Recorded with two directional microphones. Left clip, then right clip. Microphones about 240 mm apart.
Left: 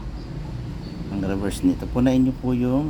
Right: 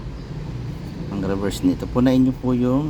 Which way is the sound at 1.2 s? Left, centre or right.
Centre.